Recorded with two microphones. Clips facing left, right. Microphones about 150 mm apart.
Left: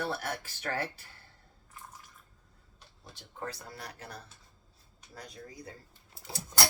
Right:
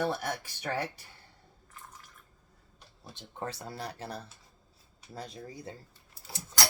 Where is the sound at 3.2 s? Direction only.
30° right (ahead or behind).